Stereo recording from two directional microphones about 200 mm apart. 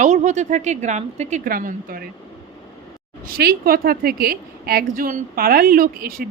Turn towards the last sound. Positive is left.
turn(degrees=-45)  # may be behind; listen again after turning